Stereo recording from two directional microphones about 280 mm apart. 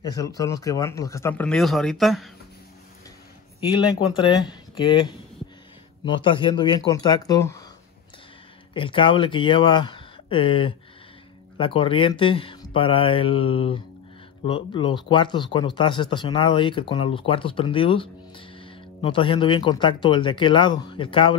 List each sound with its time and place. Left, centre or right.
0.0 s speech: centre
4.1 s speech: centre
8.7 s speech: centre